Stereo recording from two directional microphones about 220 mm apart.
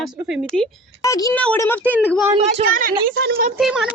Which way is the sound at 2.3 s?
35° right (ahead or behind).